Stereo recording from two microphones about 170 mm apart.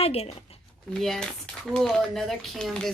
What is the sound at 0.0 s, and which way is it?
Speech, 35° left (ahead or behind).